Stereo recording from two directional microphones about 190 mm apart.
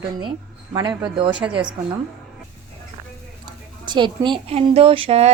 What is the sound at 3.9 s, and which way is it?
Speech, 25° right (ahead or behind).